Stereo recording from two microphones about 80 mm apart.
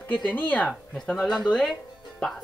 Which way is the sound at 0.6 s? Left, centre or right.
Centre.